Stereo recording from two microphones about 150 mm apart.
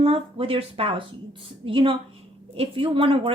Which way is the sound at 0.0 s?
40° right (ahead or behind).